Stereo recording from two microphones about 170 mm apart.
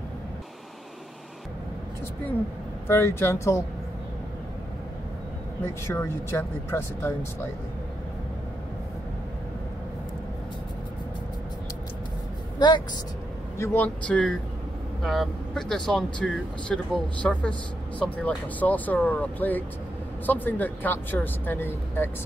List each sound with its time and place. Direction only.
2.9 s speech: 15° left (ahead or behind)
5.9 s speech: 15° left (ahead or behind)
12.5 s speech: 25° left (ahead or behind)
13.6 s speech: 10° left (ahead or behind)